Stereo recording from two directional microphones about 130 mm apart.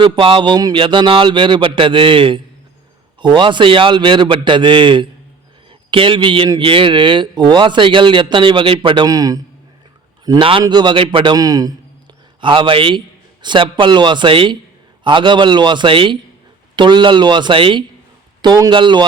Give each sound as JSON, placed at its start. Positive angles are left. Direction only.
{"t": 0.0, "sound": "a man's voice", "side_deg": -40}
{"t": 9.0, "sound": "a man's voice", "side_deg": -30}
{"t": 10.3, "sound": "a man's voice", "side_deg": -40}